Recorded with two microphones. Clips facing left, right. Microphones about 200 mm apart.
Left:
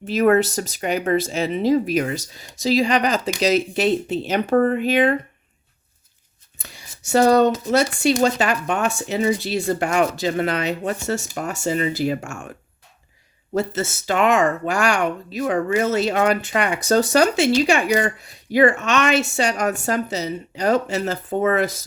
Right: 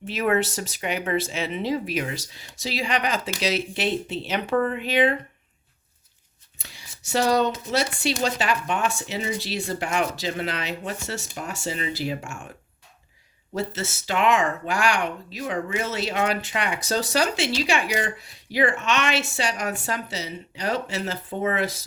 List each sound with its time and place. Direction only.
0.0 s speech: 40° left (ahead or behind)
6.6 s speech: 45° left (ahead or behind)
13.5 s speech: 45° left (ahead or behind)